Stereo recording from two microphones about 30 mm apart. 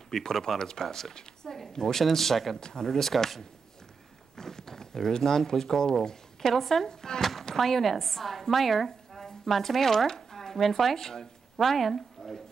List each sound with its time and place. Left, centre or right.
0.1 s speech: centre
2.5 s speech: left
4.4 s speech: centre
6.9 s speech: left
7.2 s a sound: centre
7.4 s a woman's voice: centre